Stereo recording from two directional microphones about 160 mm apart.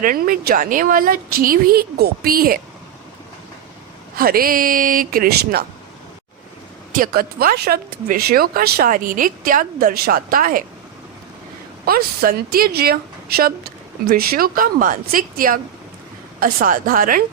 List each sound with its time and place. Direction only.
0.0 s speech: 60° right (ahead or behind)
4.2 s speech: 65° right (ahead or behind)
6.9 s speech: 65° right (ahead or behind)
11.9 s speech: 70° right (ahead or behind)